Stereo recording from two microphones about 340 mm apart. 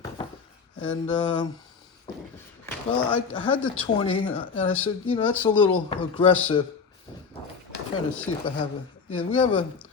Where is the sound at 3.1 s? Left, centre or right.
Centre.